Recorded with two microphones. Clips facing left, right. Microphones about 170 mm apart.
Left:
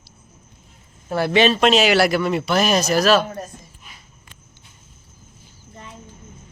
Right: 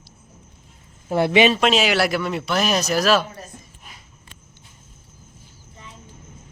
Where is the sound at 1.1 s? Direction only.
20° right (ahead or behind).